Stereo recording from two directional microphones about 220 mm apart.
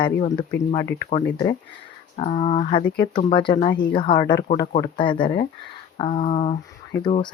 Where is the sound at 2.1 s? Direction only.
25° left (ahead or behind).